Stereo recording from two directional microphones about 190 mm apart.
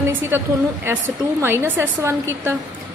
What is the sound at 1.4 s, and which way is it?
Speech, 10° right (ahead or behind).